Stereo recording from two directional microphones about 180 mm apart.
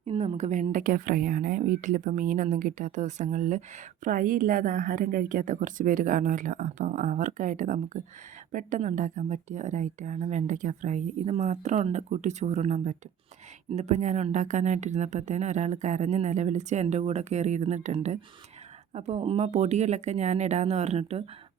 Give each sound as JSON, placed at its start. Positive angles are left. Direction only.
{"t": 0.0, "sound": "a woman's voice", "side_deg": -35}